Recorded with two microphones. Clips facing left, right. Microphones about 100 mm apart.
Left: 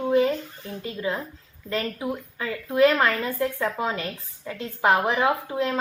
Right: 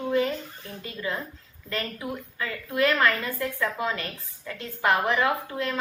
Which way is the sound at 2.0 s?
30° left (ahead or behind).